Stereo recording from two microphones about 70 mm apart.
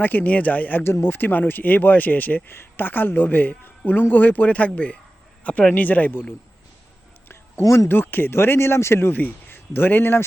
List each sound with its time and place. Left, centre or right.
0.0 s speech: left
7.6 s speech: left
7.9 s speech: left